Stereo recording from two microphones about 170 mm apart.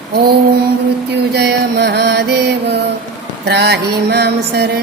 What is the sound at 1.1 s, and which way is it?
Mantra, 75° right (ahead or behind).